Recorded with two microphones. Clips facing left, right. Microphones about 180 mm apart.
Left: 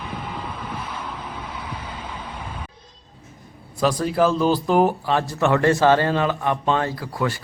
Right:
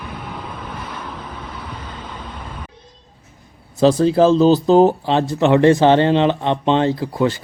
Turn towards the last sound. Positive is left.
turn(degrees=-20)  # may be behind; listen again after turning